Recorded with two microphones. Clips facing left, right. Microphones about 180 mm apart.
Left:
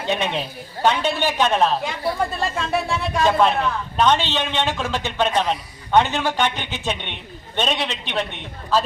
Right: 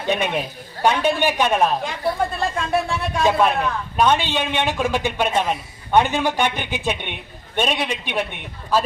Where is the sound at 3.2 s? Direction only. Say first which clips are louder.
Even; 5° right (ahead or behind).